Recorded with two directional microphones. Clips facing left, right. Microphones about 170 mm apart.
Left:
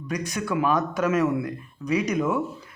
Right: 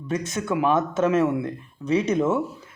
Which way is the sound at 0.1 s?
25° right (ahead or behind).